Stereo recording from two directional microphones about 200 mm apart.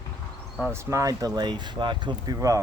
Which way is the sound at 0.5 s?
10° right (ahead or behind).